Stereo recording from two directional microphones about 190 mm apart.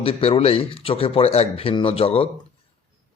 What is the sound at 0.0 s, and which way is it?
Speech, 30° left (ahead or behind).